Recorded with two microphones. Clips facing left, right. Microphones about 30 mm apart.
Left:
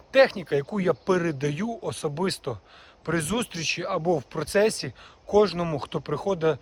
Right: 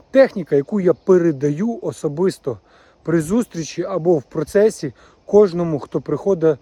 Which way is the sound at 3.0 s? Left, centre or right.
Left.